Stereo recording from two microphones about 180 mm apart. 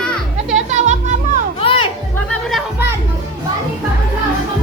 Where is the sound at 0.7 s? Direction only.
40° right (ahead or behind).